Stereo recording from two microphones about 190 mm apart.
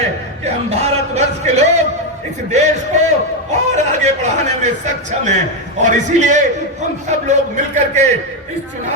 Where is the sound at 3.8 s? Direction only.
40° right (ahead or behind).